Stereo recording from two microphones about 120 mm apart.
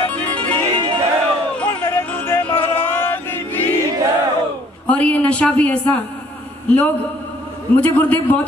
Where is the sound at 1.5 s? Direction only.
15° left (ahead or behind).